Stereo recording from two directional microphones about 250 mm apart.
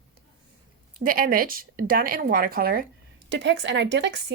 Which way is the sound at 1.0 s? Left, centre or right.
Right.